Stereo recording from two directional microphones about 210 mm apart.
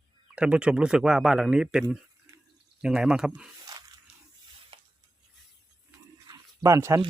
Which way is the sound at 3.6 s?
15° right (ahead or behind).